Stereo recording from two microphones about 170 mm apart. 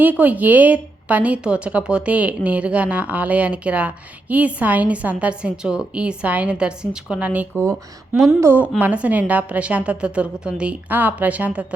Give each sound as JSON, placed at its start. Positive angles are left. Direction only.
{"t": 0.0, "sound": "speech", "side_deg": -10}